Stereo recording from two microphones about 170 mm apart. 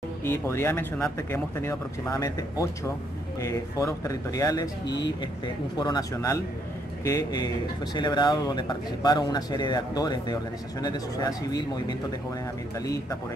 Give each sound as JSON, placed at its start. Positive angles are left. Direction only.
{"t": 0.2, "sound": "speech", "side_deg": 15}